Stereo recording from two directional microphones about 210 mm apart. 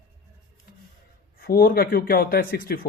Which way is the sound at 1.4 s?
45° left (ahead or behind).